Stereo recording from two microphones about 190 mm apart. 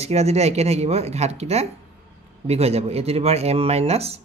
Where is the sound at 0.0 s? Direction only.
35° right (ahead or behind).